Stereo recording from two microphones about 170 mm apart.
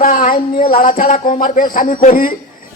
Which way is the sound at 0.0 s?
55° left (ahead or behind).